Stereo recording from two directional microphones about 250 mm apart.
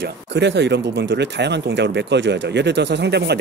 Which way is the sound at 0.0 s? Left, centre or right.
Right.